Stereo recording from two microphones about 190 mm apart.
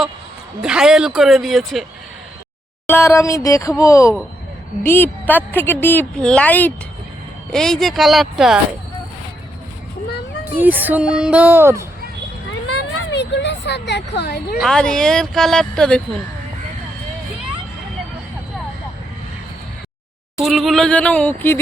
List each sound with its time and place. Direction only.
0.6 s speech: 5° right (ahead or behind)
2.8 s a woman's voice: 15° left (ahead or behind)
10.4 s speech: 10° right (ahead or behind)
13.0 s speech: 65° left (ahead or behind)
14.6 s speech: 5° left (ahead or behind)
20.4 s a woman's voice: centre (ahead or behind)